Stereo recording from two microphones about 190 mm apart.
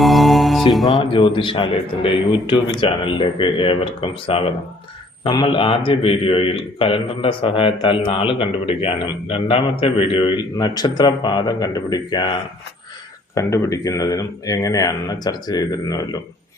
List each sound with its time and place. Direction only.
0.0 s music: centre (ahead or behind)
0.7 s speech: centre (ahead or behind)
0.9 s a man's voice: 25° left (ahead or behind)
13.3 s a man's voice: 15° left (ahead or behind)